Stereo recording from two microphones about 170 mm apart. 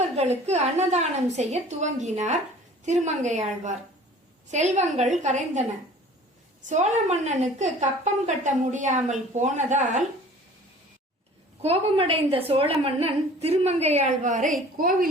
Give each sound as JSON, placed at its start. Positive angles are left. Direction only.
{"t": 0.2, "sound": "a woman's voice", "side_deg": -40}
{"t": 6.7, "sound": "a woman's voice", "side_deg": -45}
{"t": 11.6, "sound": "a woman's voice", "side_deg": -35}
{"t": 14.8, "sound": "a woman's voice", "side_deg": -55}